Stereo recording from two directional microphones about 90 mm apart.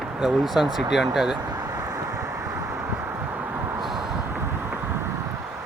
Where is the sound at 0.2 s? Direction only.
5° right (ahead or behind).